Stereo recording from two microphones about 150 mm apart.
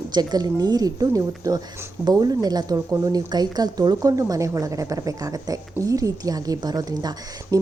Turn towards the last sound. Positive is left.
turn(degrees=-25)  # may be behind; listen again after turning